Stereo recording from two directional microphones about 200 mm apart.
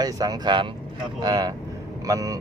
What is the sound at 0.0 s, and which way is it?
Speech, 20° right (ahead or behind).